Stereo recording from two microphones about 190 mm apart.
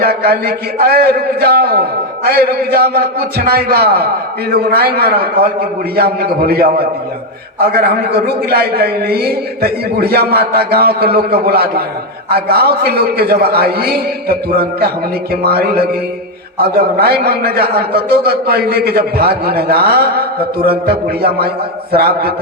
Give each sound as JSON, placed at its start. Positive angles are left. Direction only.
{"t": 0.0, "sound": "a man's voice", "side_deg": -55}